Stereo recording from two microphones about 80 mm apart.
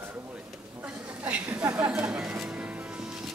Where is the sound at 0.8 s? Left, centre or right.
Centre.